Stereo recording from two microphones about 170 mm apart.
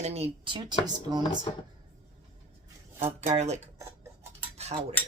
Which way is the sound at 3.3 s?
40° right (ahead or behind).